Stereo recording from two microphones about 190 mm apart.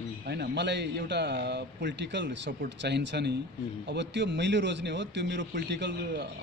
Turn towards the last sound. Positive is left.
turn(degrees=-70)  # may be behind; listen again after turning